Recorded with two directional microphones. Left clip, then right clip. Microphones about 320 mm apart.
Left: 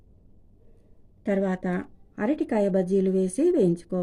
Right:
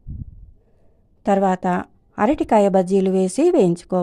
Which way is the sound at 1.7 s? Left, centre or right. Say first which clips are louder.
Right 10 dB; right.